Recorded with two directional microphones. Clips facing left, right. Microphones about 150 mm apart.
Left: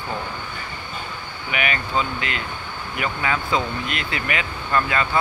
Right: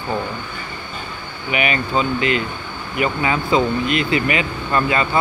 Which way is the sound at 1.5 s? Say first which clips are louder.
Right 5 dB; 15° right (ahead or behind).